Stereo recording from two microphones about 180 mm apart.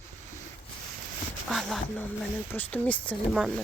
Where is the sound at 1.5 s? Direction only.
Centre (ahead or behind).